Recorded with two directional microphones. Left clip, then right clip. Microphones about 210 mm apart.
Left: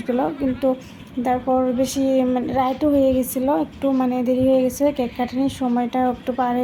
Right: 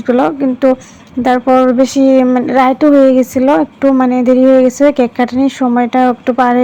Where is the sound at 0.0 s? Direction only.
20° right (ahead or behind).